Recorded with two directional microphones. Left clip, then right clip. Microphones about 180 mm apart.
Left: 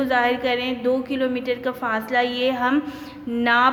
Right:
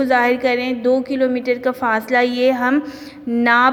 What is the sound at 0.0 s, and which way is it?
A woman's voice, 30° right (ahead or behind).